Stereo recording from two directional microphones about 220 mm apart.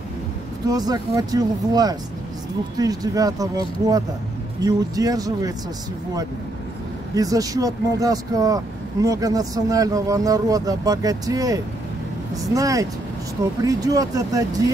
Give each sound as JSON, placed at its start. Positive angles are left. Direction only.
{"t": 0.7, "sound": "speech", "side_deg": -15}
{"t": 7.2, "sound": "speech", "side_deg": -15}